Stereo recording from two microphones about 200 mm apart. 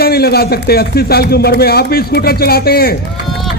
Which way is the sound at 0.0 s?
50° left (ahead or behind).